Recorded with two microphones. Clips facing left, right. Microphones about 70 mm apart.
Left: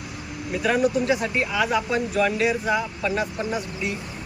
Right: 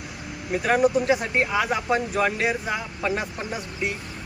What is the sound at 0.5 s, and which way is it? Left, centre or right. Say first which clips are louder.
Speech: right 1 dB; right.